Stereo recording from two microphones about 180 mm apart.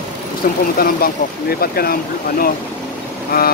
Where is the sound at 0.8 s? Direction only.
55° left (ahead or behind).